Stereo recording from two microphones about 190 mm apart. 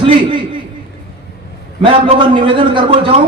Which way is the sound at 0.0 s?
25° right (ahead or behind).